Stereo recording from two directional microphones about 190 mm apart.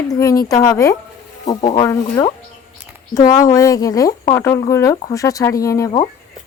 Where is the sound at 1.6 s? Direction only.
35° left (ahead or behind).